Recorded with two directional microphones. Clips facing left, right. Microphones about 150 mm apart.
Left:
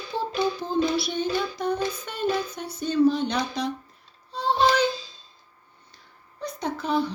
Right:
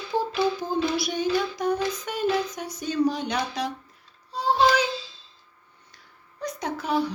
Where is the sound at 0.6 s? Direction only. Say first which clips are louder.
Left 1 dB; 10° right (ahead or behind).